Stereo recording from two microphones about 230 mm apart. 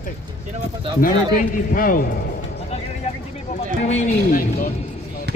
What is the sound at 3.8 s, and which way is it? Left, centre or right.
Speech, left.